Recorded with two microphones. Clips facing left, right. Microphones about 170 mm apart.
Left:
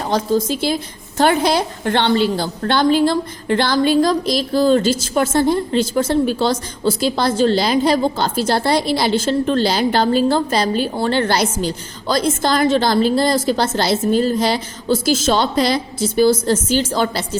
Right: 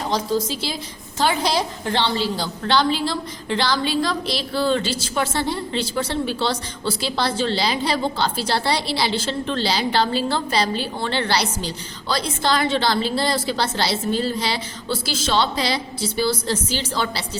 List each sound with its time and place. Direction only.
0.1 s a woman's voice: 55° left (ahead or behind)